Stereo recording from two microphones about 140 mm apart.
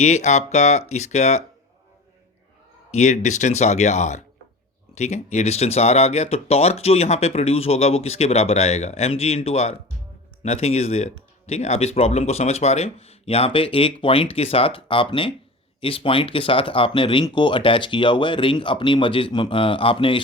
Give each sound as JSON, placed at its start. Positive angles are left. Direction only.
{"t": 0.0, "sound": "speech", "side_deg": 55}
{"t": 2.9, "sound": "speech", "side_deg": 55}